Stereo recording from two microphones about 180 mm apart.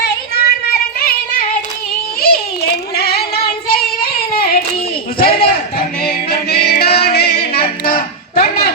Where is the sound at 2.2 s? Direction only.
60° left (ahead or behind).